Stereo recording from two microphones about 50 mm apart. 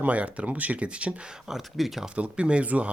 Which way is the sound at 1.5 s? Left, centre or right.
Centre.